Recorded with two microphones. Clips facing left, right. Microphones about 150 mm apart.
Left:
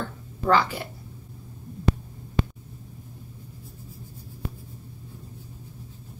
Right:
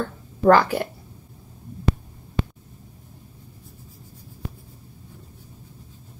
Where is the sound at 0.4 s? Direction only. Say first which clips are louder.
Right 6 dB; 55° right (ahead or behind).